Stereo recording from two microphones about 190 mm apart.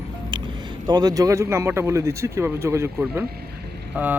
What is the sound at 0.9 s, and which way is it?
Speech, 20° right (ahead or behind).